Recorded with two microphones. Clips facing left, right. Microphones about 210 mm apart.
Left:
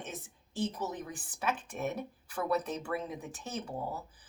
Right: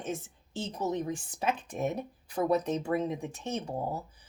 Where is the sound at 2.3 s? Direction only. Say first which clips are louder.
Right 5 dB; 25° right (ahead or behind).